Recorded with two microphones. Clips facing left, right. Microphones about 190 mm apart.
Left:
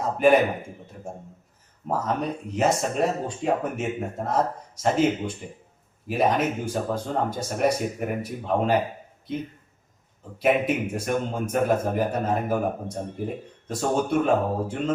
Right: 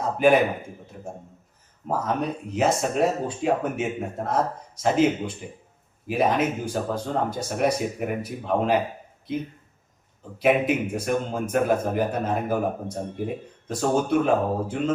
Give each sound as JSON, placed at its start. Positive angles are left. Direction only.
{"t": 1.9, "sound": "a man's voice", "side_deg": 0}
{"t": 10.3, "sound": "a man's voice", "side_deg": 0}